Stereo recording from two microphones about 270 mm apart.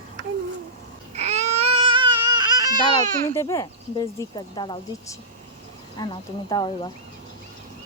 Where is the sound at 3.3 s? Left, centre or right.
Centre.